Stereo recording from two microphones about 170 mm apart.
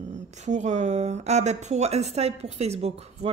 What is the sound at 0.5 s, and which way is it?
Speech, 45° right (ahead or behind).